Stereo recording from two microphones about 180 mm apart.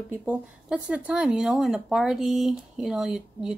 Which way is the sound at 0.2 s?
5° right (ahead or behind).